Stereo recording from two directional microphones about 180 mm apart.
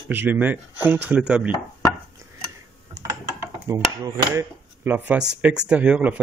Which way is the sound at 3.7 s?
20° right (ahead or behind).